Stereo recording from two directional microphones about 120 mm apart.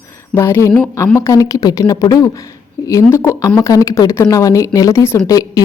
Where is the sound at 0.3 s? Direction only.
20° left (ahead or behind).